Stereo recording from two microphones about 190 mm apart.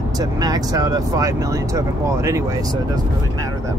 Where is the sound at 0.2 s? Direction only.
20° right (ahead or behind).